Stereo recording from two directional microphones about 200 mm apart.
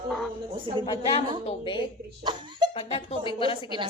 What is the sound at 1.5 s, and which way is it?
A woman's voice, 25° left (ahead or behind).